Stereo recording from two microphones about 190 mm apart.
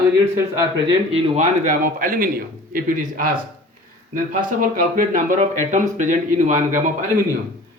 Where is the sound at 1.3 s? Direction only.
45° right (ahead or behind).